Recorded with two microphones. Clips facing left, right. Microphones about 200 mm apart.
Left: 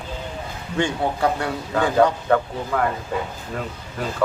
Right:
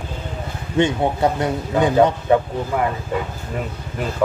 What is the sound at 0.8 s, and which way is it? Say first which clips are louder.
Speech: right 4 dB; 20° right (ahead or behind).